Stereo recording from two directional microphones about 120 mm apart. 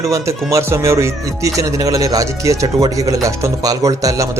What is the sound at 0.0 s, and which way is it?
Speech, 25° right (ahead or behind).